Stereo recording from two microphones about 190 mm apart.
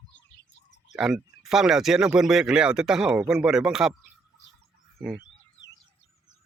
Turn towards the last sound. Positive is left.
turn(degrees=0)  # may be behind; listen again after turning